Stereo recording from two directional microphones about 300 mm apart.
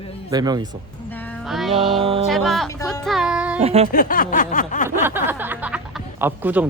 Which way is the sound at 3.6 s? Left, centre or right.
Centre.